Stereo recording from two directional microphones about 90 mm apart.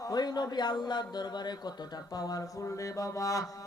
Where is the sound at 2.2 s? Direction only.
40° left (ahead or behind).